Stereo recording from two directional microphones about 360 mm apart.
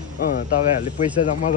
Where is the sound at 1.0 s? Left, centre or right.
Centre.